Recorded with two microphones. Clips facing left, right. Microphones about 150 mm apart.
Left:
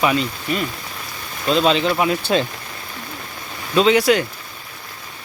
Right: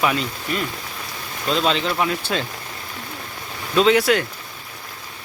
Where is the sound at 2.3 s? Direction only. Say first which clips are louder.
Left 6 dB; 25° left (ahead or behind).